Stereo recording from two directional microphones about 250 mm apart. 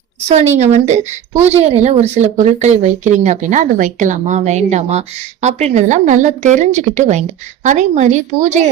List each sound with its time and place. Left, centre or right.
0.6 s a woman's voice: right